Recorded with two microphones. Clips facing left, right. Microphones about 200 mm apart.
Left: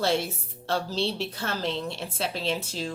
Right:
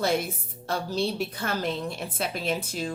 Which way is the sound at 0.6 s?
15° right (ahead or behind).